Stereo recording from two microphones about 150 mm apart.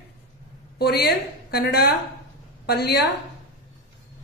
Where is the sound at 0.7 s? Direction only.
90° left.